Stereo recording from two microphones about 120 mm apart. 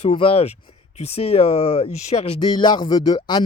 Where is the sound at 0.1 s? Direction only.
50° left (ahead or behind).